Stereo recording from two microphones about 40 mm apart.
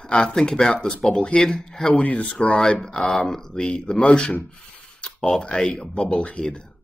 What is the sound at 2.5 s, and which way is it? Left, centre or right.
Speech, centre.